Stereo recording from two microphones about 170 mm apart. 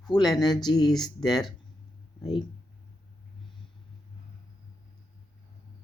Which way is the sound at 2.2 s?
25° left (ahead or behind).